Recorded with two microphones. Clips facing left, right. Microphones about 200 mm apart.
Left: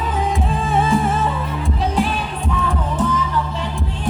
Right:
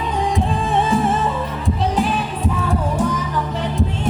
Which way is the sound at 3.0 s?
15° right (ahead or behind).